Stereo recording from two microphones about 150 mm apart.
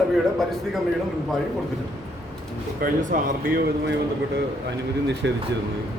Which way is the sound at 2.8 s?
60° right (ahead or behind).